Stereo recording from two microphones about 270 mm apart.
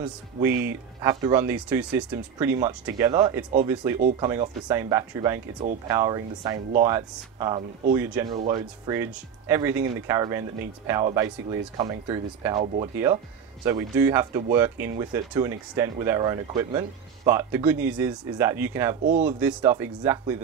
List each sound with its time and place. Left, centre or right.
0.0 s speech: centre
12.9 s speech: centre